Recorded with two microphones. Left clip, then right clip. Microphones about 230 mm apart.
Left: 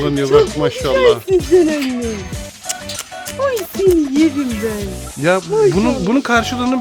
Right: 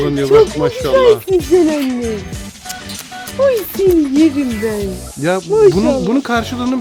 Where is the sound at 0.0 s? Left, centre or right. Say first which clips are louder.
Right 2 dB; centre.